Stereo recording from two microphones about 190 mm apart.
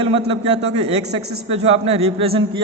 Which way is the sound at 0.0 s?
30° right (ahead or behind).